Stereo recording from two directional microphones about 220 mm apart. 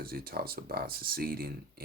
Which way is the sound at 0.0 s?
45° right (ahead or behind).